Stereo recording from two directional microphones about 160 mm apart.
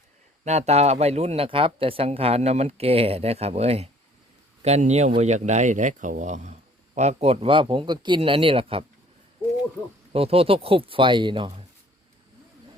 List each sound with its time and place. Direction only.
0.4 s speech: 45° right (ahead or behind)
10.1 s speech: 35° right (ahead or behind)